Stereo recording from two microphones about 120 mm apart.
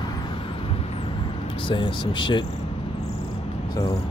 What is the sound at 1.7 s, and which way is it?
Speech, 40° left (ahead or behind).